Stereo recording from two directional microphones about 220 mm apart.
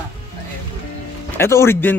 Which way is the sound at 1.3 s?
10° left (ahead or behind).